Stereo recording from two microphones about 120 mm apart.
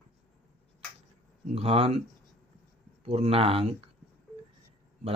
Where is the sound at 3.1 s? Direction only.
55° right (ahead or behind).